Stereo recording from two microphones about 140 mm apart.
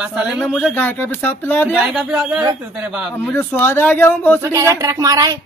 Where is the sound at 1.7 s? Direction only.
5° right (ahead or behind).